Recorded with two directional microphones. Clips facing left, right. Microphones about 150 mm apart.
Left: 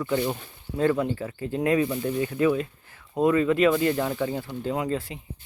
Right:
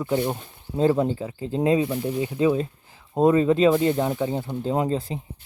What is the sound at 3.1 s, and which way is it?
Speech, 30° right (ahead or behind).